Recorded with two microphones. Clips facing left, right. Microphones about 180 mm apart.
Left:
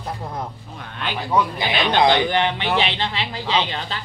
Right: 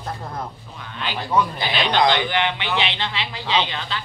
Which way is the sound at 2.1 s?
40° left (ahead or behind).